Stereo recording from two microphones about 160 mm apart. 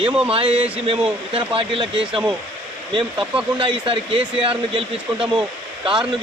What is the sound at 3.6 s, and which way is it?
Speech, 35° right (ahead or behind).